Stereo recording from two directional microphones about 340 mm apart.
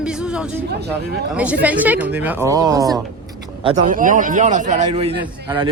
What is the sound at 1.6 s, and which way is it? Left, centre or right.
Snicker, centre.